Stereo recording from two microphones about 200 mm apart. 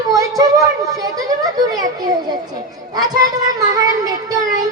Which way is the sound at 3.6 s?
20° right (ahead or behind).